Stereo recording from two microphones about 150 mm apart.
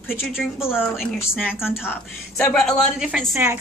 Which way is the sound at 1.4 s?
15° left (ahead or behind).